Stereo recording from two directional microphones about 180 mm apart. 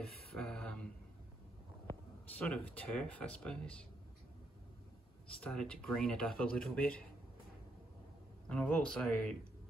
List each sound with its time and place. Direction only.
0.3 s a sound: 5° left (ahead or behind)
2.3 s speech: 5° left (ahead or behind)
5.4 s speech: 5° left (ahead or behind)
8.5 s speech: 5° left (ahead or behind)